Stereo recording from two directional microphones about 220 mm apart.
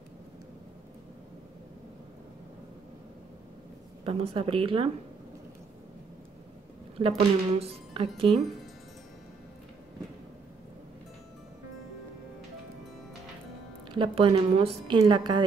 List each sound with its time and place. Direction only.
4.0 s a woman's voice: 25° right (ahead or behind)
7.0 s a woman's voice: 30° right (ahead or behind)
13.8 s a woman's voice: 25° right (ahead or behind)